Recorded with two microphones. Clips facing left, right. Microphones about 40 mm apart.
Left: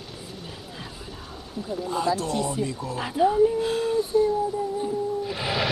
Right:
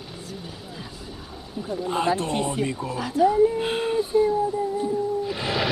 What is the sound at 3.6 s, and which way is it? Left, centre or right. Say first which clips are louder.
Speech: even; right.